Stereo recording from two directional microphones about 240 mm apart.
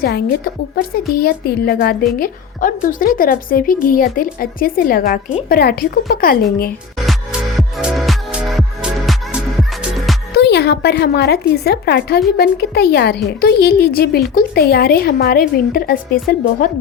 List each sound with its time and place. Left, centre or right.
0.0 s a woman's voice: left
7.8 s music: centre
10.3 s a woman's voice: left